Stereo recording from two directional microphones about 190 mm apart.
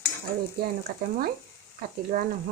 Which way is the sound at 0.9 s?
50° right (ahead or behind).